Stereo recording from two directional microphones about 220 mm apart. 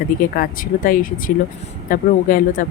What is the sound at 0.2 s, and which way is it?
Speech, 40° left (ahead or behind).